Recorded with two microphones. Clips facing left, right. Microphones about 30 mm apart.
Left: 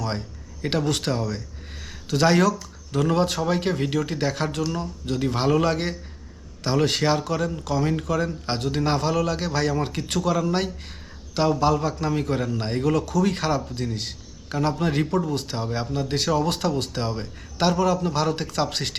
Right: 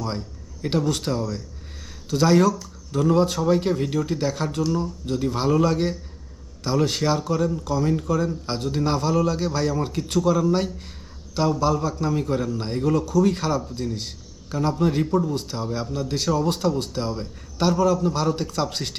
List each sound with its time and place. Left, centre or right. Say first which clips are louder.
0.0 s speech: even; centre
12.8 s speech: right 3 dB; left